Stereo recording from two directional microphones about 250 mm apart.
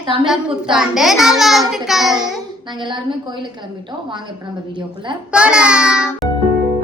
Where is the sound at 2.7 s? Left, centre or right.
Centre.